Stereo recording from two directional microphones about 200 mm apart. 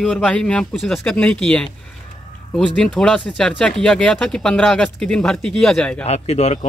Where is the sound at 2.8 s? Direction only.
5° left (ahead or behind).